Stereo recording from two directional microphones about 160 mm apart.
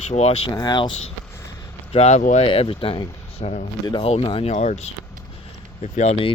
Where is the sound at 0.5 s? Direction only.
25° left (ahead or behind).